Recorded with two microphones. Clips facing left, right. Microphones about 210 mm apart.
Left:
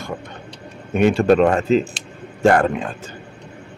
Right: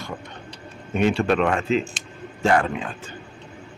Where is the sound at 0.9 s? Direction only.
50° left (ahead or behind).